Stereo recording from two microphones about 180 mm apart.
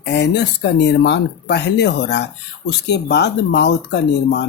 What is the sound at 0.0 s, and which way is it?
Speech, 70° left (ahead or behind).